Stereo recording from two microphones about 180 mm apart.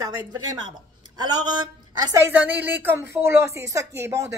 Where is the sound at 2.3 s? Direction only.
10° right (ahead or behind).